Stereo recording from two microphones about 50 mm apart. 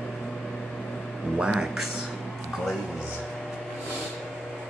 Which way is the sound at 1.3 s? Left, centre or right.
Centre.